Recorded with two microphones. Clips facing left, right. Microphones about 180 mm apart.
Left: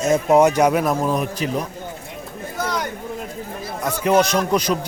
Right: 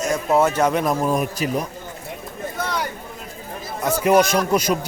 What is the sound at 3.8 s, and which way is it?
Speech, 10° right (ahead or behind).